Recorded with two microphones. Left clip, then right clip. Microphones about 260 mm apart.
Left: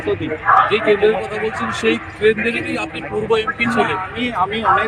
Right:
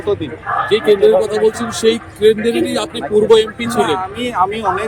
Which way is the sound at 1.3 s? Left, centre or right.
Right.